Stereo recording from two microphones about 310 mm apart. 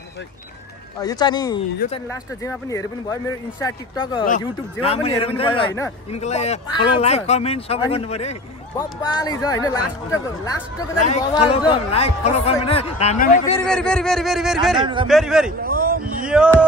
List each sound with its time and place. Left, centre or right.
1.0 s a man's voice: centre
11.0 s a man's voice: left
13.7 s speech: centre
15.6 s a sound: right
16.3 s speech: centre